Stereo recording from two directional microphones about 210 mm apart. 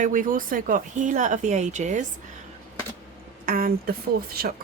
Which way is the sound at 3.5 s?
40° right (ahead or behind).